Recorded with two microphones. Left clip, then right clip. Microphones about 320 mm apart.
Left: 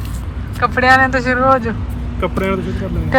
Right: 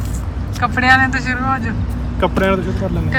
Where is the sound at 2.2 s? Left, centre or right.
Right.